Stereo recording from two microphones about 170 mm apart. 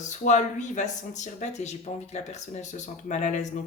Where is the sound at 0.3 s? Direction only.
45° left (ahead or behind).